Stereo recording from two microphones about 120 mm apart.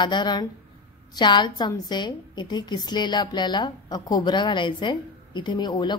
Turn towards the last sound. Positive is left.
turn(degrees=35)  # may be behind; listen again after turning